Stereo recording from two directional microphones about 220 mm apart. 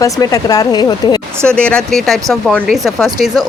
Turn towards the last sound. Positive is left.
turn(degrees=0)  # may be behind; listen again after turning